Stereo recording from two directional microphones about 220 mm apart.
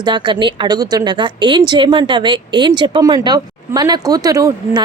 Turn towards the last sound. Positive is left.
turn(degrees=-15)  # may be behind; listen again after turning